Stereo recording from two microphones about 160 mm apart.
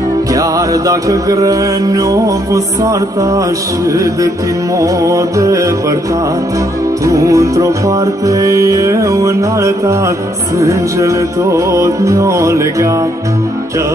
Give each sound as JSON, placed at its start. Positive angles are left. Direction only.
{"t": 0.3, "sound": "music", "side_deg": -20}
{"t": 7.1, "sound": "music", "side_deg": -20}